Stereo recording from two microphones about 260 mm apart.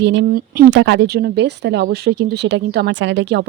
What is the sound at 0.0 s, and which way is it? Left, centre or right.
Speech, right.